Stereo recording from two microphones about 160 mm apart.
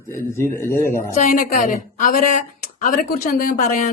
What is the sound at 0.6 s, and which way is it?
Speech, 15° left (ahead or behind).